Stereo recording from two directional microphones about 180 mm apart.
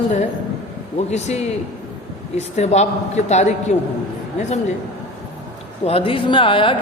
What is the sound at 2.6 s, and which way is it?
Speech, 40° left (ahead or behind).